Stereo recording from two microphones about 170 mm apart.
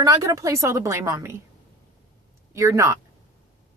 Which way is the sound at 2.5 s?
15° right (ahead or behind).